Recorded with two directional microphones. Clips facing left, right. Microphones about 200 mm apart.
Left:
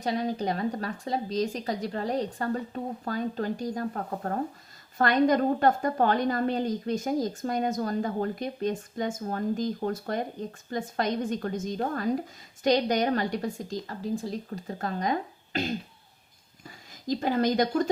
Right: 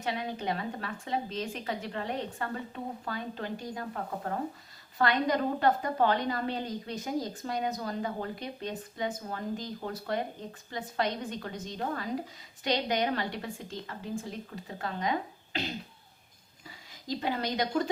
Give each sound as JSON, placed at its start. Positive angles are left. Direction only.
{"t": 0.0, "sound": "a woman's voice", "side_deg": 40}